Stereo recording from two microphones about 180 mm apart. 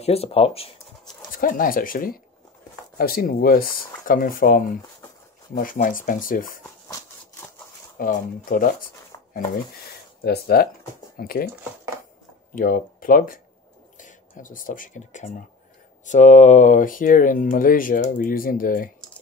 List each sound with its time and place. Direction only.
0.0 s speech: 35° left (ahead or behind)
1.3 s speech: 50° left (ahead or behind)
6.9 s a sound: 15° left (ahead or behind)
8.0 s speech: 50° left (ahead or behind)
9.1 s a sound: 20° left (ahead or behind)
10.2 s speech: 60° left (ahead or behind)
12.5 s speech: 50° left (ahead or behind)